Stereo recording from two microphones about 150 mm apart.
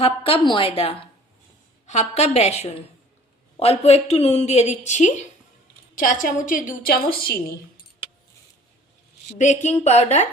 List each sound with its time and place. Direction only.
0.0 s a woman's voice: 40° left (ahead or behind)
5.9 s a woman's voice: 65° left (ahead or behind); by 7.9 s 90° left
9.4 s a woman's voice: 55° left (ahead or behind)